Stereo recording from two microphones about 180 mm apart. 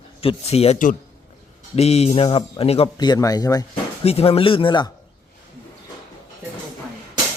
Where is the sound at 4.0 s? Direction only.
35° left (ahead or behind).